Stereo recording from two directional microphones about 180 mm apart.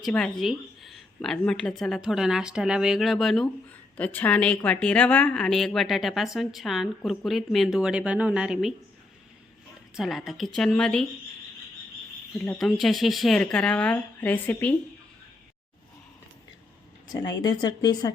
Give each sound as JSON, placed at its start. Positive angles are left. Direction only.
{"t": 0.0, "sound": "speech", "side_deg": 5}
{"t": 9.9, "sound": "speech", "side_deg": 0}
{"t": 12.5, "sound": "speech", "side_deg": 0}
{"t": 17.3, "sound": "speech", "side_deg": 20}